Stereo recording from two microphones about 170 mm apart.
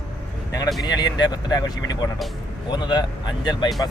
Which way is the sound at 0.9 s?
25° left (ahead or behind).